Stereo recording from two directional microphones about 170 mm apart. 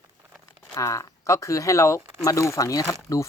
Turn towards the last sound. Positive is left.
turn(degrees=20)  # may be behind; listen again after turning